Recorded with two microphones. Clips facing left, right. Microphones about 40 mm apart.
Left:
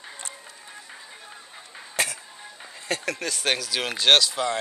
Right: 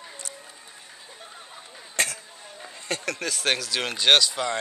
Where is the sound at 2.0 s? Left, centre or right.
Centre.